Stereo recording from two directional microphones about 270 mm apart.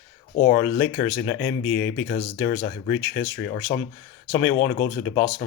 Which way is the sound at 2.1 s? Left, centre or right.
Centre.